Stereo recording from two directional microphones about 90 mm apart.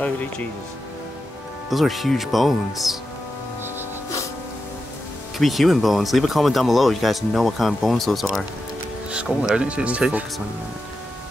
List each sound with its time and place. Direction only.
1.7 s speech: centre (ahead or behind)
5.4 s speech: centre (ahead or behind)
9.1 s speech: 10° right (ahead or behind)